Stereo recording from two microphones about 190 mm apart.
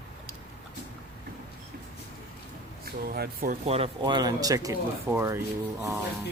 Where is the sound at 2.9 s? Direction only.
55° right (ahead or behind).